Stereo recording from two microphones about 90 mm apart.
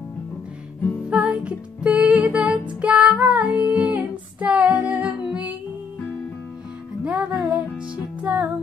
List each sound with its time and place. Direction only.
1.1 s music: 15° right (ahead or behind)
2.8 s female singing: 15° right (ahead or behind)
7.1 s music: 15° right (ahead or behind)